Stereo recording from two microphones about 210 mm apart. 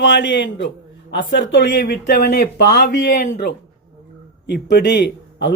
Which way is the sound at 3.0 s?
40° left (ahead or behind).